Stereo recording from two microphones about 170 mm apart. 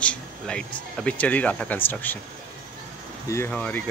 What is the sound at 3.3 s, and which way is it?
Speech, 15° left (ahead or behind).